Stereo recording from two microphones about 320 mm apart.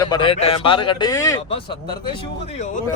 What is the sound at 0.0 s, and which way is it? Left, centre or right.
A man's voice, centre.